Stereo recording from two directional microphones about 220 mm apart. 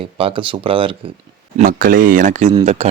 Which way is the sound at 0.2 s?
25° right (ahead or behind).